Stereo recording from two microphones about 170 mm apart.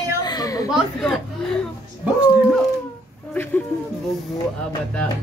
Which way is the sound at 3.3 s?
10° left (ahead or behind).